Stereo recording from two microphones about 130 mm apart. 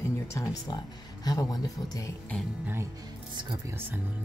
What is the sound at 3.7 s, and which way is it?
Speech, 15° right (ahead or behind).